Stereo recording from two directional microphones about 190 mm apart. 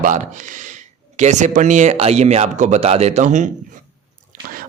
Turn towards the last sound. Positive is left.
turn(degrees=-40)  # may be behind; listen again after turning